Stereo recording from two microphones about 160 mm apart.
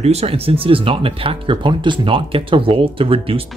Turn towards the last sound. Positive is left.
turn(degrees=-35)  # may be behind; listen again after turning